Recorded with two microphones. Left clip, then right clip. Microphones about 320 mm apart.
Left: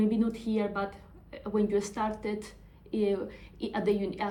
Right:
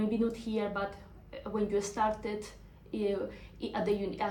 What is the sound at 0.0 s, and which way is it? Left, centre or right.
A woman's voice, left.